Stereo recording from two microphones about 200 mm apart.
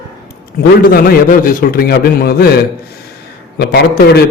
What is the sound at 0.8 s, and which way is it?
A man's voice, 45° left (ahead or behind).